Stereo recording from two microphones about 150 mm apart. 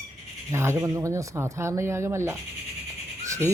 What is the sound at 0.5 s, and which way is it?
Speech, 20° right (ahead or behind).